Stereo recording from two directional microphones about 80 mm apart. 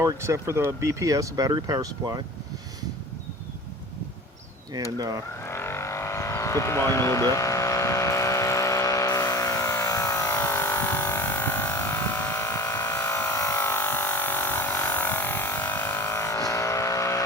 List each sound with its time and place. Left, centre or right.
0.0 s speech: right
4.7 s speech: right
5.4 s vehicle: left
10.2 s vehicle: left
12.9 s a sound: left
13.6 s a sound: left
16.0 s vehicle: left